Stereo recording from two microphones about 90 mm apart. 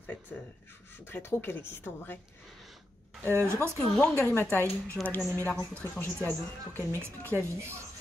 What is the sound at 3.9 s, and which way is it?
Speech, 5° left (ahead or behind).